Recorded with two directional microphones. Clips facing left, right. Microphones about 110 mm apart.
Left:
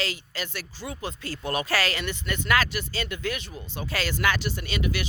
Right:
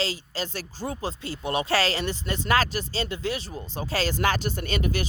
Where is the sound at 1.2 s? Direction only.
20° right (ahead or behind).